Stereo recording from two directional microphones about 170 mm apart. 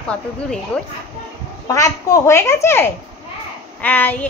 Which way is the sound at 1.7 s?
20° left (ahead or behind).